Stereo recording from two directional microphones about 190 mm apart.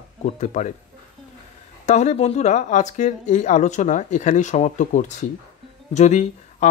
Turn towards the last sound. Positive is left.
turn(degrees=40)  # may be behind; listen again after turning